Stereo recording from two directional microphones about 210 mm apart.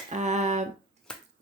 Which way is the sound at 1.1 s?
5° left (ahead or behind).